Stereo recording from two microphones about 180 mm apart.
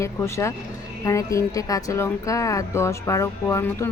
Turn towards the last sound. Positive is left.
turn(degrees=15)  # may be behind; listen again after turning